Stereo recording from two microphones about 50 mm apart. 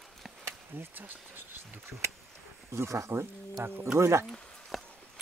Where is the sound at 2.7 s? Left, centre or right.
Right.